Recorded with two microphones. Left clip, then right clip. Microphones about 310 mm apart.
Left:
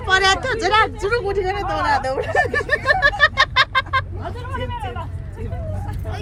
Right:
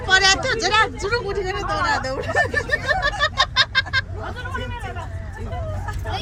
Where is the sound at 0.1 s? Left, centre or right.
Left.